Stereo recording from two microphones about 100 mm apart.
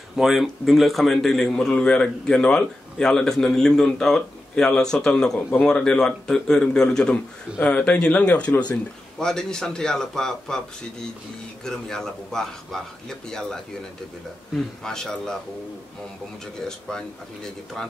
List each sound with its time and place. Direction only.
0.2 s a man's voice: centre (ahead or behind)
11.6 s a man's voice: 5° left (ahead or behind)
16.5 s a man's voice: 5° left (ahead or behind)